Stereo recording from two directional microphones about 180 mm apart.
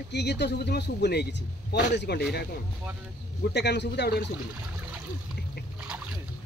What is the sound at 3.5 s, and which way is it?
Speech, 70° left (ahead or behind).